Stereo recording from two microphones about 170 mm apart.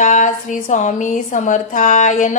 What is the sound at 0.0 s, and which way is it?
Music, 50° left (ahead or behind).